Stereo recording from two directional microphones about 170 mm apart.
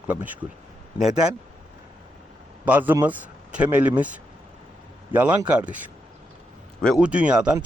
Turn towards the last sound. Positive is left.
turn(degrees=-5)  # may be behind; listen again after turning